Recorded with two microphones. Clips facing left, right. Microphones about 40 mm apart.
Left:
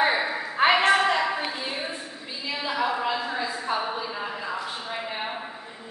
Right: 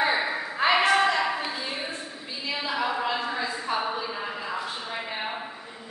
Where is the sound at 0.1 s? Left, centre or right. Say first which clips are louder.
Even; centre.